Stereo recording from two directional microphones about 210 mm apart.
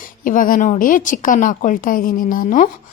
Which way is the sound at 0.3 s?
40° left (ahead or behind).